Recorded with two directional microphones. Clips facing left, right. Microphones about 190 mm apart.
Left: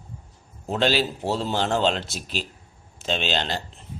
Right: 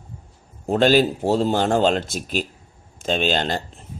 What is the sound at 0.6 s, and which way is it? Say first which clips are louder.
A man's voice: right 7 dB; 50° right (ahead or behind).